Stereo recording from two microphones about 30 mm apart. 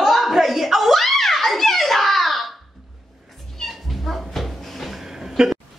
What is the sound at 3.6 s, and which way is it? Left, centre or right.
Cat, centre.